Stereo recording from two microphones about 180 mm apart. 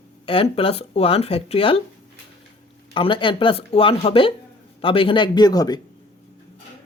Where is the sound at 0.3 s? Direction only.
30° left (ahead or behind).